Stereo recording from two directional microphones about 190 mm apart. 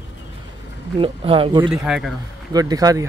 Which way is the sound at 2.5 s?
20° right (ahead or behind).